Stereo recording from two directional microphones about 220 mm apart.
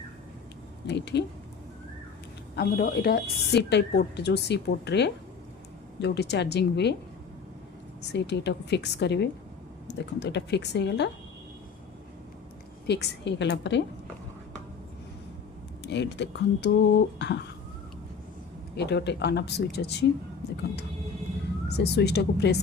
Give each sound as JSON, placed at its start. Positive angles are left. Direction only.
{"t": 0.9, "sound": "a woman's voice", "side_deg": 50}
{"t": 2.6, "sound": "a woman's voice", "side_deg": 40}
{"t": 8.1, "sound": "a woman's voice", "side_deg": 50}
{"t": 12.9, "sound": "a woman's voice", "side_deg": 50}
{"t": 15.8, "sound": "a woman's voice", "side_deg": 50}
{"t": 18.8, "sound": "a woman's voice", "side_deg": 50}
{"t": 21.7, "sound": "a woman's voice", "side_deg": 50}